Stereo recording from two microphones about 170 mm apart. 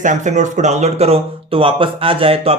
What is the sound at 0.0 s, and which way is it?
Speech, 45° right (ahead or behind).